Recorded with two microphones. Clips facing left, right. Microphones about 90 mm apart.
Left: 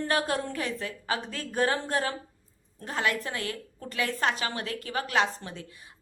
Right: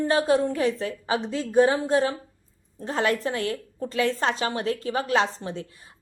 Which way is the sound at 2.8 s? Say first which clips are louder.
Right 5 dB; 30° right (ahead or behind).